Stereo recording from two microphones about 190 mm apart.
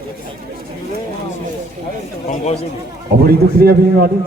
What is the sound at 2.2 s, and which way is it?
Chatter, 35° left (ahead or behind).